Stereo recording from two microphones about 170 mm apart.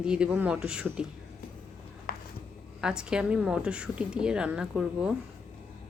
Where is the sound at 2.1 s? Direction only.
60° left (ahead or behind).